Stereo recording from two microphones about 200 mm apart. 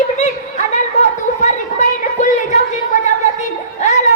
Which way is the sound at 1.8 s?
35° left (ahead or behind).